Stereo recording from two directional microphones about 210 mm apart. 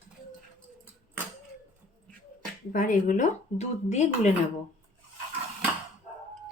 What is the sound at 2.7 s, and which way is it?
A woman's voice, 40° left (ahead or behind).